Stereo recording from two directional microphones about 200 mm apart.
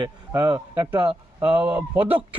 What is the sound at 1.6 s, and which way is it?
Speech, 10° right (ahead or behind).